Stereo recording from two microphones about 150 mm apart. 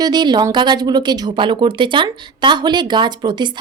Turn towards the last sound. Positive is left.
turn(degrees=-30)  # may be behind; listen again after turning